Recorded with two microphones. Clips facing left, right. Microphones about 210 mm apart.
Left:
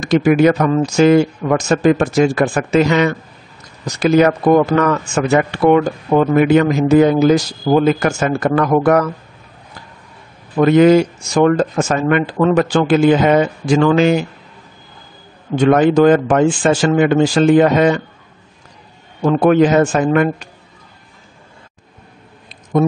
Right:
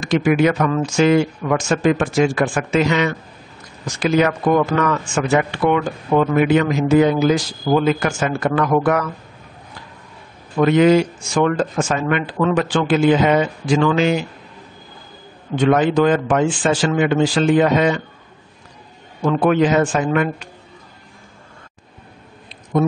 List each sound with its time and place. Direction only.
0.0 s speech: 40° left (ahead or behind)
10.6 s speech: 45° left (ahead or behind)
15.5 s speech: 45° left (ahead or behind)
19.2 s speech: 45° left (ahead or behind)